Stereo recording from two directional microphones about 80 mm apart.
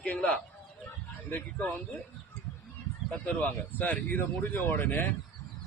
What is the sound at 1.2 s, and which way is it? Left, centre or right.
Speech, left.